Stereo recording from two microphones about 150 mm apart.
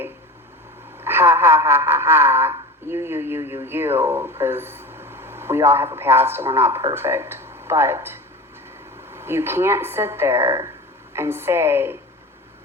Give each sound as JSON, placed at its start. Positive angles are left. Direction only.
{"t": 1.0, "sound": "a woman's voice", "side_deg": -15}